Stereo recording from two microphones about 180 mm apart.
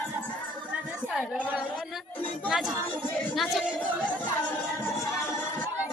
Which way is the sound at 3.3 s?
Centre (ahead or behind).